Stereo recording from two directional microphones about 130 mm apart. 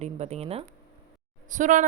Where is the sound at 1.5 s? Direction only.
75° right (ahead or behind).